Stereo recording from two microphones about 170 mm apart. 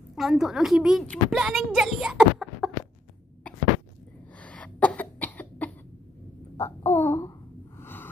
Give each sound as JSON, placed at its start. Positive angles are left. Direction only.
{"t": 0.1, "sound": "a woman's voice", "side_deg": 0}
{"t": 4.4, "sound": "cough", "side_deg": 5}
{"t": 6.5, "sound": "babbling", "side_deg": 15}